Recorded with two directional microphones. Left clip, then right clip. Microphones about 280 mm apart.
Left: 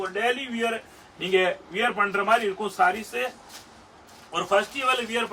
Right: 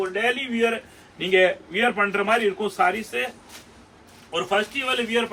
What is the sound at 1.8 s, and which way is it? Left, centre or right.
Speech, centre.